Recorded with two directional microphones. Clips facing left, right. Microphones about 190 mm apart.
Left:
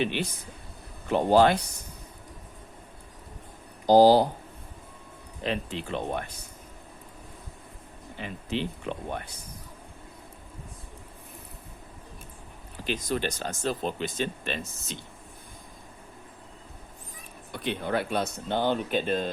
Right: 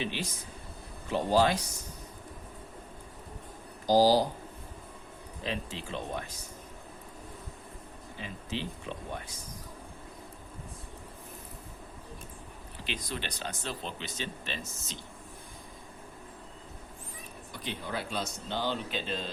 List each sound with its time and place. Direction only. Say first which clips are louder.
0.0 s speech: left 6 dB; 60° left (ahead or behind)
3.8 s speech: left 6 dB; 60° left (ahead or behind)
5.4 s speech: left 6 dB; 60° left (ahead or behind)
8.2 s speech: left 6 dB; 60° left (ahead or behind)
12.8 s speech: left 9 dB; 45° left (ahead or behind)
17.5 s speech: left 8 dB; 60° left (ahead or behind)